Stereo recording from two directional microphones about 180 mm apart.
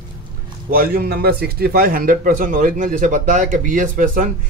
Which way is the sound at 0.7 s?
55° right (ahead or behind).